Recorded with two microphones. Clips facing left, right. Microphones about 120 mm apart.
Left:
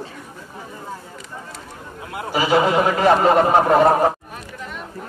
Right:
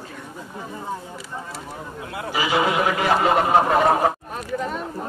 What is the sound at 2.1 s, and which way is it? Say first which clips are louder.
A man's voice: left 5 dB; 35° left (ahead or behind).